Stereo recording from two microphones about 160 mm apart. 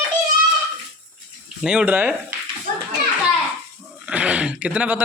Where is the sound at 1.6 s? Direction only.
5° right (ahead or behind).